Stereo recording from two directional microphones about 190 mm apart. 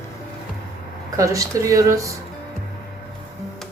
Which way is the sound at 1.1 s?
15° right (ahead or behind).